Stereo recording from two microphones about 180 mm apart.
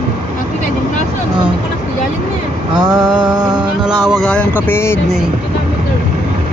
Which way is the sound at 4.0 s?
Centre (ahead or behind).